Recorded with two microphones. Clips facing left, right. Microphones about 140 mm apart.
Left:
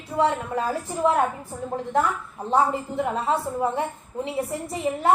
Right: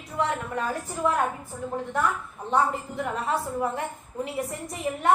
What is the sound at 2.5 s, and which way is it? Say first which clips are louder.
A woman's voice: left 3 dB; 25° left (ahead or behind).